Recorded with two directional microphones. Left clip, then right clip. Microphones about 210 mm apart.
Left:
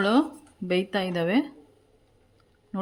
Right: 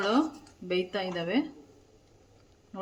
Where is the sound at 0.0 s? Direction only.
50° left (ahead or behind).